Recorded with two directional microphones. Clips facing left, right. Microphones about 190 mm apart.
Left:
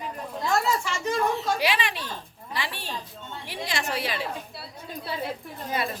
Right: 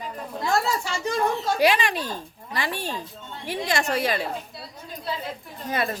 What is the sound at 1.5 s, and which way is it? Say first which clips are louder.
A woman's voice: right 6 dB; 45° right (ahead or behind).